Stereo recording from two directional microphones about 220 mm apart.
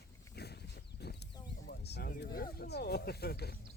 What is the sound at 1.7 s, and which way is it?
Speech, 50° left (ahead or behind).